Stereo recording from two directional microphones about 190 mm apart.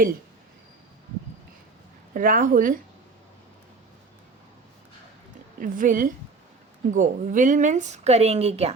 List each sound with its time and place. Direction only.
2.1 s a woman's voice: 45° right (ahead or behind)
5.5 s a woman's voice: 45° right (ahead or behind)